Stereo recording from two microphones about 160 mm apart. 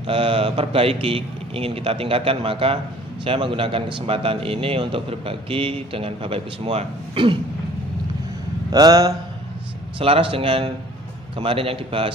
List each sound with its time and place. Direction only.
0.0 s a man's voice: 35° right (ahead or behind)
8.7 s mantra: 25° right (ahead or behind)
9.9 s a man's voice: 35° right (ahead or behind)